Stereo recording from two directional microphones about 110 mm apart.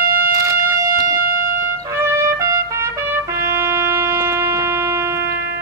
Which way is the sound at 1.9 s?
25° right (ahead or behind).